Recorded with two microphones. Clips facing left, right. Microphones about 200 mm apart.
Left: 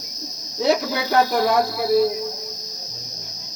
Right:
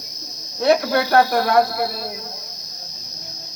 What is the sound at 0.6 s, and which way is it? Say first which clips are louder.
Speech: right 3 dB; 60° right (ahead or behind).